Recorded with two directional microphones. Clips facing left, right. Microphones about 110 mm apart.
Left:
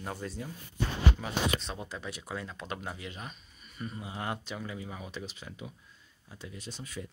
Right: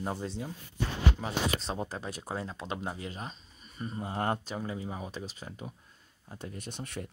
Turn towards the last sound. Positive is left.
turn(degrees=-55)  # may be behind; listen again after turning